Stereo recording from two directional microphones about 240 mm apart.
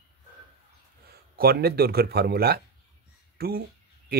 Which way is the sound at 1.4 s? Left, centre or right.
Right.